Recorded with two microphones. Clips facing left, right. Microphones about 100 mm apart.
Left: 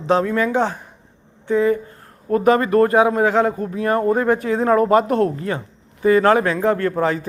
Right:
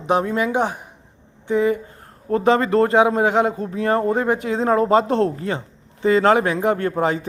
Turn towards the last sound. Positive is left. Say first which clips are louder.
# left 1 dB
turn(degrees=-20)  # may be behind; listen again after turning